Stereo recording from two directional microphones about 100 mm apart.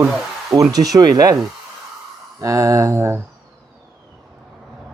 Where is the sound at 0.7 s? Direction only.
40° right (ahead or behind).